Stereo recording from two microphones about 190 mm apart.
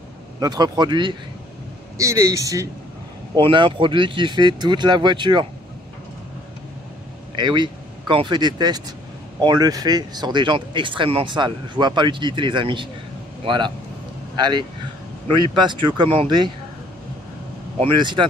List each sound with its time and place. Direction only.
0.4 s speech: 20° right (ahead or behind)
7.3 s speech: 25° right (ahead or behind)
17.7 s speech: 25° right (ahead or behind)